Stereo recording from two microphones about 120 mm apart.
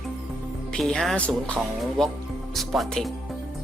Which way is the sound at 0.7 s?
5° left (ahead or behind).